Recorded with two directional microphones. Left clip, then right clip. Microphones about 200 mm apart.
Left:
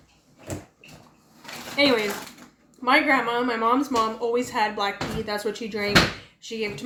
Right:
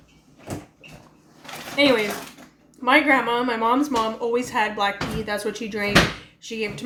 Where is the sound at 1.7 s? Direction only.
Centre (ahead or behind).